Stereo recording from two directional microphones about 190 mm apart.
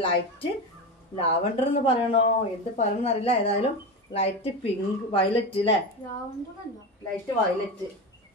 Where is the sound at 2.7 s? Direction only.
30° left (ahead or behind).